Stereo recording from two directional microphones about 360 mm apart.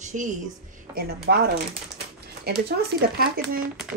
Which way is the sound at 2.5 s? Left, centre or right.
Right.